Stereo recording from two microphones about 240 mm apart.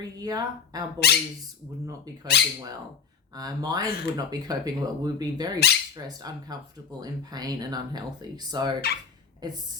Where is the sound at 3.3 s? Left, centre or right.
Centre.